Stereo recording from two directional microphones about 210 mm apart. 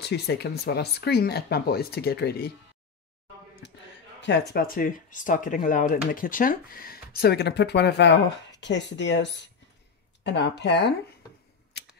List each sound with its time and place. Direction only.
0.0 s speech: 50° left (ahead or behind)
4.2 s speech: 50° left (ahead or behind)